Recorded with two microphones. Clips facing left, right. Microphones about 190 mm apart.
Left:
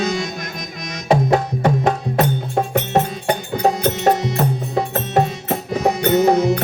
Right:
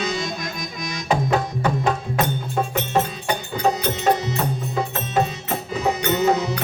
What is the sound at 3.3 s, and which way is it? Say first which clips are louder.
Music: left 4 dB; 60° left (ahead or behind).